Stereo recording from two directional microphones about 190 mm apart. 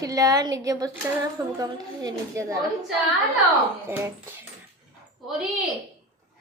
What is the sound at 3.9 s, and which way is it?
Speech, 10° right (ahead or behind).